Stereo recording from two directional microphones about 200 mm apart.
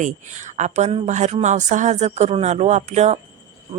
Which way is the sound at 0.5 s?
35° right (ahead or behind).